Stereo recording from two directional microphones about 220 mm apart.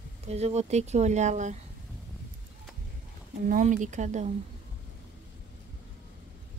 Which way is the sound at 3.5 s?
35° right (ahead or behind).